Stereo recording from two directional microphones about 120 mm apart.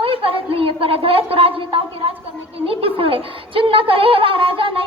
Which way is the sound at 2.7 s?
50° right (ahead or behind).